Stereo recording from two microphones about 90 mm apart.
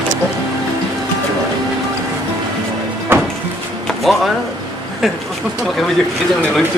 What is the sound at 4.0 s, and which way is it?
Speech, centre (ahead or behind).